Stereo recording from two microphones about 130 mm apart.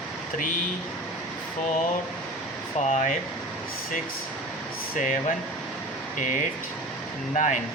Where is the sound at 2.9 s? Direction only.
65° left (ahead or behind).